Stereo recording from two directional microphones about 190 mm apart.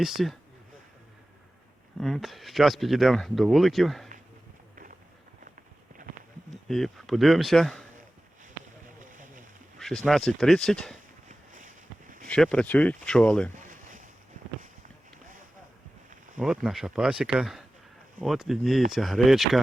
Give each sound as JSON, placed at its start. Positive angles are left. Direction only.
{"t": 0.0, "sound": "speech", "side_deg": 0}
{"t": 2.0, "sound": "speech", "side_deg": 0}
{"t": 4.7, "sound": "walk", "side_deg": -45}
{"t": 6.7, "sound": "speech", "side_deg": 0}
{"t": 9.7, "sound": "speech", "side_deg": 0}
{"t": 11.3, "sound": "a sound", "side_deg": -40}
{"t": 12.3, "sound": "speech", "side_deg": 5}
{"t": 13.6, "sound": "a sound", "side_deg": -40}
{"t": 16.4, "sound": "speech", "side_deg": -5}